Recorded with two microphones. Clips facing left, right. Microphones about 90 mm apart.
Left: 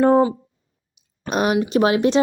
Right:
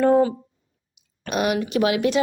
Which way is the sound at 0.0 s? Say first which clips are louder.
Left 2 dB; 30° left (ahead or behind).